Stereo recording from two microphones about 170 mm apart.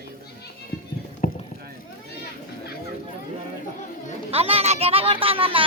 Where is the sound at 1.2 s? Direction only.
45° left (ahead or behind).